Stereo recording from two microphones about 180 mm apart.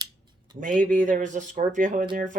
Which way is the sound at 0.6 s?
45° right (ahead or behind).